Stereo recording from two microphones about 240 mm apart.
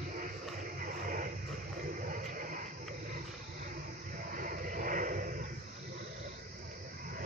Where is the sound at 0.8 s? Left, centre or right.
Right.